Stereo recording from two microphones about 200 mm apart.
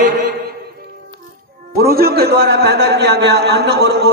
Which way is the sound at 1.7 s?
50° right (ahead or behind).